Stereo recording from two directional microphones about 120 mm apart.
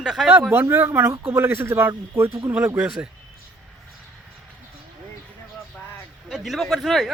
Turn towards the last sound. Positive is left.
turn(degrees=0)  # may be behind; listen again after turning